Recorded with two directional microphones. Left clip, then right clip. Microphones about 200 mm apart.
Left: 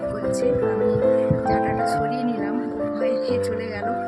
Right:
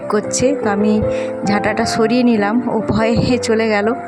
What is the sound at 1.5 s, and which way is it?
A woman's voice, 40° right (ahead or behind).